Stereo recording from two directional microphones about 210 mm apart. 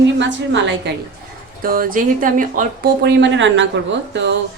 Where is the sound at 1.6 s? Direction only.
40° right (ahead or behind).